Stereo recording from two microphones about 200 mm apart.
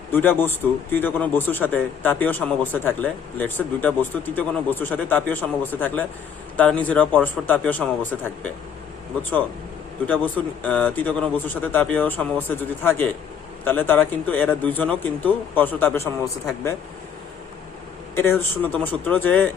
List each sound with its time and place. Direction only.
0.1 s a man's voice: 10° left (ahead or behind)
10.1 s a man's voice: 10° left (ahead or behind)
18.1 s a man's voice: 10° left (ahead or behind)